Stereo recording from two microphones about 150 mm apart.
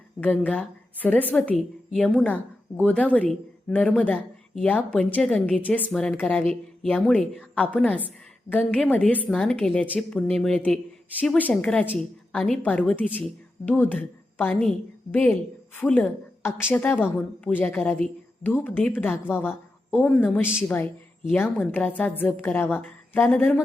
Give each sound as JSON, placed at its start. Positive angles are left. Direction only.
{"t": 0.2, "sound": "a woman's voice", "side_deg": 10}